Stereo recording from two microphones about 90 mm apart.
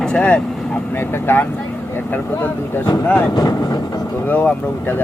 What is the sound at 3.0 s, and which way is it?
Speech, 20° left (ahead or behind).